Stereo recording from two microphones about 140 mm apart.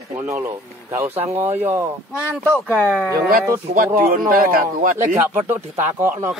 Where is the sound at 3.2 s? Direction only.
90° right.